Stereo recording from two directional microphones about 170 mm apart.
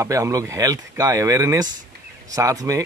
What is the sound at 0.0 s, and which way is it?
Speech, 20° right (ahead or behind).